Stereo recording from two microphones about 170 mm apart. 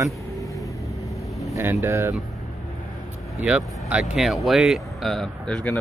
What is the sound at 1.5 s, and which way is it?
Speech, 15° right (ahead or behind).